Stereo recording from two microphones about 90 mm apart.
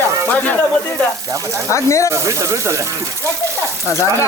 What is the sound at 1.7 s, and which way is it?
Speech, 35° left (ahead or behind).